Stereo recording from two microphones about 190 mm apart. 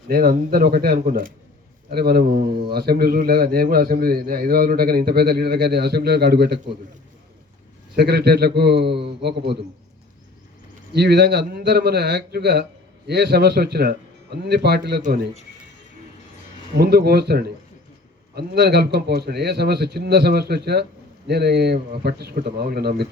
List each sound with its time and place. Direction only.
0.1 s a man's voice: 50° right (ahead or behind)
7.9 s a man's voice: 60° right (ahead or behind)
10.9 s a man's voice: 60° right (ahead or behind)
16.7 s a man's voice: 55° right (ahead or behind)